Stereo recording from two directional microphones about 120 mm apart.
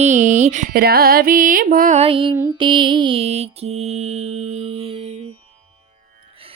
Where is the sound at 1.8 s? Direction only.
70° right (ahead or behind).